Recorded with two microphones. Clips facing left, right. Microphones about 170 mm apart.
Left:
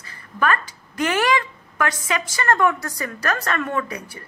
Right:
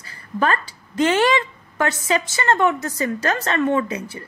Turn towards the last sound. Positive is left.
turn(degrees=-25)  # may be behind; listen again after turning